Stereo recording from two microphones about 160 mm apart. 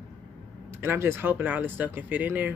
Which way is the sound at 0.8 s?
15° right (ahead or behind).